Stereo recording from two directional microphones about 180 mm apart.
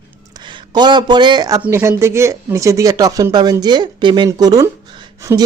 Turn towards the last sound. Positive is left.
turn(degrees=-20)  # may be behind; listen again after turning